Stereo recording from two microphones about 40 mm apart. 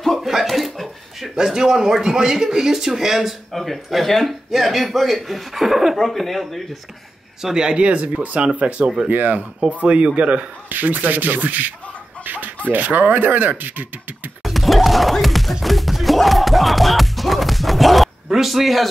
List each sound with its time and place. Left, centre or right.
0.0 s a sound: centre
0.3 s a sound: centre
1.3 s speech: centre
3.5 s a man's voice: centre
5.9 s a man's voice: centre
7.5 s speech: right
9.1 s speech: right
9.7 s speech: right
10.7 s speech: right
12.2 s chicken: right
12.6 s speech: right
14.4 s music: centre